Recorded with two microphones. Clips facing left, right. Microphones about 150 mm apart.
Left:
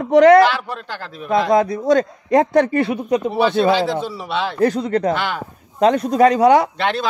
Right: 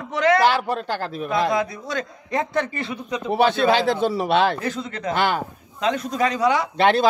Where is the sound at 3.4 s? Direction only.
55° right (ahead or behind).